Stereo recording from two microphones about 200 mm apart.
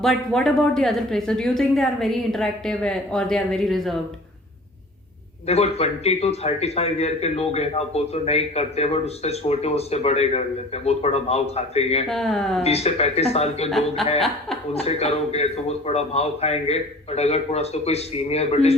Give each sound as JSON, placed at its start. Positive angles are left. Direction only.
{"t": 0.0, "sound": "a woman's voice", "side_deg": 0}
{"t": 5.5, "sound": "a man's voice", "side_deg": 30}
{"t": 12.0, "sound": "a woman's voice", "side_deg": 0}
{"t": 12.6, "sound": "a man's voice", "side_deg": 30}
{"t": 14.0, "sound": "a woman's voice", "side_deg": 0}
{"t": 14.7, "sound": "a man's voice", "side_deg": 30}